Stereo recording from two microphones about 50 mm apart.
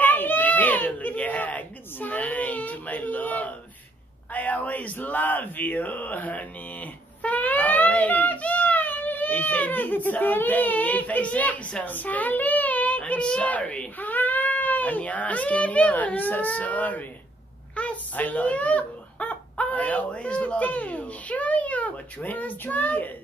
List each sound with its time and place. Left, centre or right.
0.0 s a sound: left
4.3 s speech: left
13.9 s a child's voice: left